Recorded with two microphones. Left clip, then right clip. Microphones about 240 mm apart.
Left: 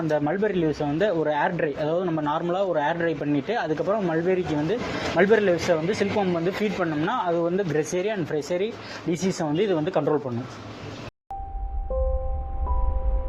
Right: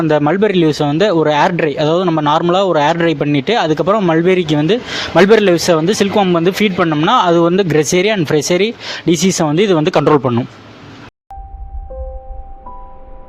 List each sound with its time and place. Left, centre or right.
0.1 s speech: right